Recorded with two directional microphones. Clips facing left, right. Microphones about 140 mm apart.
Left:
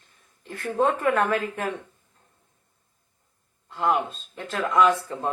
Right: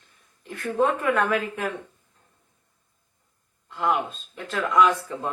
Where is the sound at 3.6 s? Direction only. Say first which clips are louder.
Left 1 dB; 30° left (ahead or behind).